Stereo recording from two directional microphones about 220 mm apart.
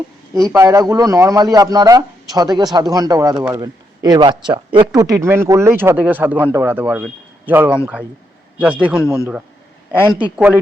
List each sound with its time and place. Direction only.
0.4 s a man's voice: 15° right (ahead or behind)